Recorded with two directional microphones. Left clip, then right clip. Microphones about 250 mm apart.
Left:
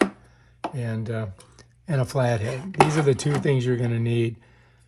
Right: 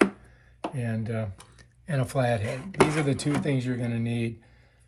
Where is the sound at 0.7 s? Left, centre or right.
Centre.